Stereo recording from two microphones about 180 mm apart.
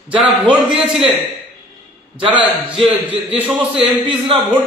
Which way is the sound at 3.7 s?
30° right (ahead or behind).